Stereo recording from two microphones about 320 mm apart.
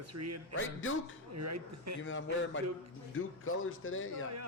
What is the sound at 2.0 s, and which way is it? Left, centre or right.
A man's voice, left.